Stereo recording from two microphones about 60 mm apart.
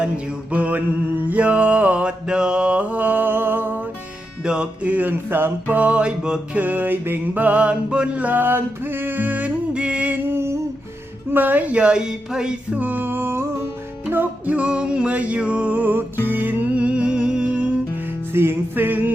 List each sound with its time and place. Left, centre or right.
0.5 s music: right
1.3 s mantra: right
4.4 s music: centre
6.6 s mantra: right
10.2 s a sound: right
11.3 s speech: right; by 12.5 s centre
12.7 s a sound: right
14.1 s music: right
18.3 s music: right